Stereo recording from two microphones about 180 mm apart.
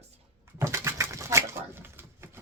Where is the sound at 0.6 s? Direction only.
15° right (ahead or behind).